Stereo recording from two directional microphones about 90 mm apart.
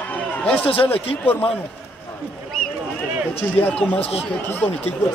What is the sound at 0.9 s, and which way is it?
Speech, 90° left.